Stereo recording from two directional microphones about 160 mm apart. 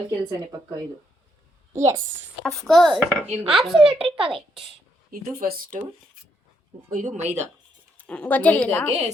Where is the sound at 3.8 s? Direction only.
35° right (ahead or behind).